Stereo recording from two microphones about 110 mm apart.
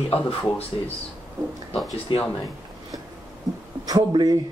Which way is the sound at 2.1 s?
50° left (ahead or behind).